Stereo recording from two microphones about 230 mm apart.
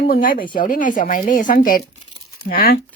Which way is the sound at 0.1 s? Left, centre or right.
Left.